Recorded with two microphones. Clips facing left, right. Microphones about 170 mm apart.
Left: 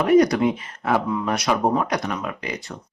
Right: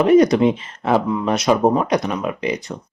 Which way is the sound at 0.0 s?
25° right (ahead or behind).